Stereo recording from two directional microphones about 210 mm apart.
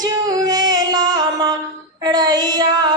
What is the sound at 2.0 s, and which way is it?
Child singing, 20° right (ahead or behind).